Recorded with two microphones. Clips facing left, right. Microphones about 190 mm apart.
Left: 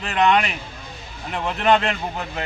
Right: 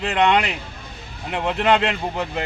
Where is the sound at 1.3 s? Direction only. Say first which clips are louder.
Even; 20° right (ahead or behind).